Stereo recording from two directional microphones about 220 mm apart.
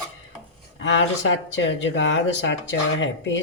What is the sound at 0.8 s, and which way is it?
Speech, 55° left (ahead or behind).